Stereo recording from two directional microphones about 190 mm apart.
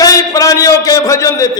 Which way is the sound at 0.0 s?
20° left (ahead or behind).